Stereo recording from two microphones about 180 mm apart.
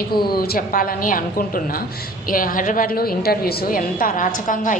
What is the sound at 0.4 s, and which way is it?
Speech, 50° left (ahead or behind).